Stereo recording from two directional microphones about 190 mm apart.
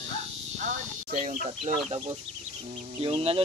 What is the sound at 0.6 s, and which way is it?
Speech, 40° right (ahead or behind).